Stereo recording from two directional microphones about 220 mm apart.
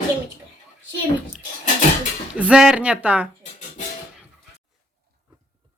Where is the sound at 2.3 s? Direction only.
5° right (ahead or behind).